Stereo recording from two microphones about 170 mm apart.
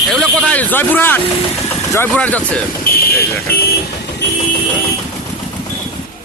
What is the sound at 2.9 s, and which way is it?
Vehicle, 60° left (ahead or behind).